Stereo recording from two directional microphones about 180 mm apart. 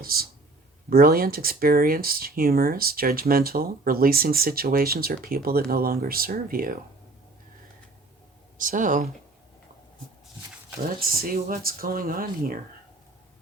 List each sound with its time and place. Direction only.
0.0 s a sound: 55° right (ahead or behind)
0.9 s speech: 55° right (ahead or behind)
8.5 s speech: 45° right (ahead or behind)
10.8 s speech: 55° right (ahead or behind)